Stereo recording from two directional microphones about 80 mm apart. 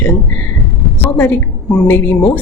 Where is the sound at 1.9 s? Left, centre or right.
Left.